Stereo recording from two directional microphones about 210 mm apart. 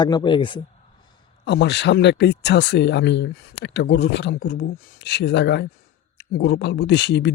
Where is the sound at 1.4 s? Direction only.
55° left (ahead or behind).